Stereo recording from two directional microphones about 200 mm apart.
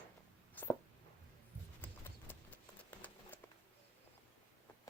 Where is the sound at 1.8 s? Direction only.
10° left (ahead or behind).